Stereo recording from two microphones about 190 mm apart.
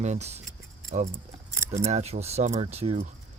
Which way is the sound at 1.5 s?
15° right (ahead or behind).